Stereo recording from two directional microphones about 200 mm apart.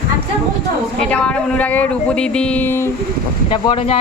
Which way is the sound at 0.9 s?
5° left (ahead or behind).